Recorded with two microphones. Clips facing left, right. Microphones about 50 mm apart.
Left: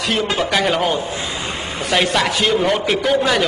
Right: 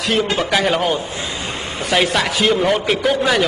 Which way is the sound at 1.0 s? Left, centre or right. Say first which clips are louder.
Left 1 dB; left.